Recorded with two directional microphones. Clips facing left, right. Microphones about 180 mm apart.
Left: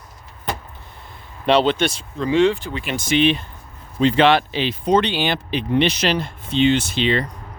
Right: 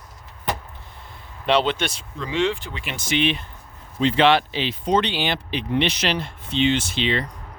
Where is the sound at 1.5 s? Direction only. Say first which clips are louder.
Left 4 dB; 35° left (ahead or behind).